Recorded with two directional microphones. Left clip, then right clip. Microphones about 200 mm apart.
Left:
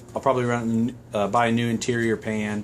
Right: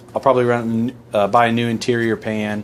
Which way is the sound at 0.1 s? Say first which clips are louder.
Right 7 dB; 35° right (ahead or behind).